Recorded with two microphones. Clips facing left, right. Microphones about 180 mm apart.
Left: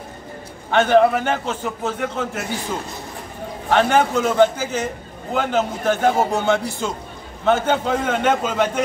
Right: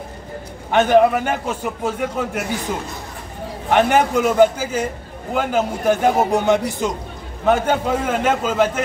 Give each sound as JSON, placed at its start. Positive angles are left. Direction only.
{"t": 0.7, "sound": "a man's voice", "side_deg": -15}
{"t": 3.7, "sound": "a man's voice", "side_deg": -15}